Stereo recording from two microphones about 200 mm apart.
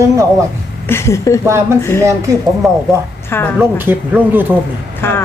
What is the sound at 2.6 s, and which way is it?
A woman's voice, centre (ahead or behind).